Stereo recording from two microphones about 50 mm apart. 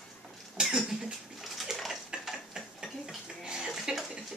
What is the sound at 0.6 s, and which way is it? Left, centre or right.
Cough, centre.